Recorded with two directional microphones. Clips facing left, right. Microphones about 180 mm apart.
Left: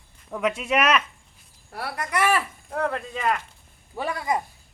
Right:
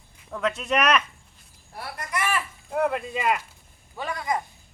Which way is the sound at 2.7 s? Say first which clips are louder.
Right 2 dB; 10° right (ahead or behind).